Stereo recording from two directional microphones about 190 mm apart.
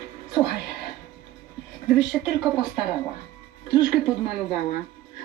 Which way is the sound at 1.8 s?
5° right (ahead or behind).